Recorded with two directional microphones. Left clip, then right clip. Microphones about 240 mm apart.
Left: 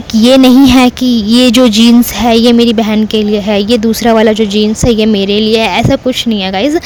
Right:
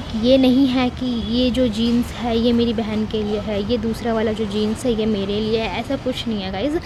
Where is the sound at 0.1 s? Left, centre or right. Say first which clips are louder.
Left 10 dB; left.